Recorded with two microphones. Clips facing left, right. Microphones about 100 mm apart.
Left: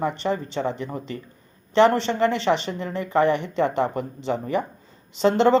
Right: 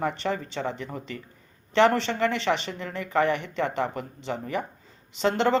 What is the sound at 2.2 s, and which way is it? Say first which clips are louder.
Speech: left 4 dB; 35° left (ahead or behind).